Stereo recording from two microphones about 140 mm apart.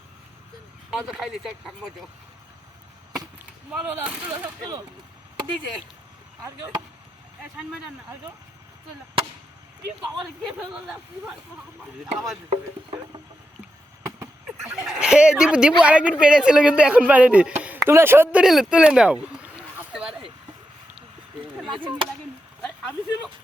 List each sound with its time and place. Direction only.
0.9 s speech: 5° right (ahead or behind)
3.7 s speech: 5° right (ahead or behind)
6.4 s speech: 25° right (ahead or behind)
7.4 s speech: 5° right (ahead or behind)
10.6 s speech: 5° right (ahead or behind)
12.5 s frog: 35° right (ahead or behind)
14.4 s speech: 5° right (ahead or behind)
21.8 s frog: 35° right (ahead or behind)